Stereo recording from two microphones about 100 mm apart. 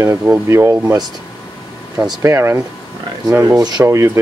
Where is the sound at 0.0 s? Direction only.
25° right (ahead or behind).